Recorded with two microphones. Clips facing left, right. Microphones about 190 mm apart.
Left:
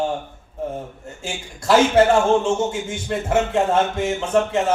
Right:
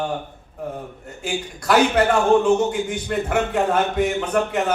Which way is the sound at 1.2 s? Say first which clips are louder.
Right 1 dB; 25° left (ahead or behind).